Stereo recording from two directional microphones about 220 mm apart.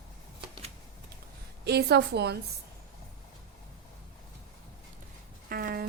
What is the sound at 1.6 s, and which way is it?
Speech, 50° right (ahead or behind).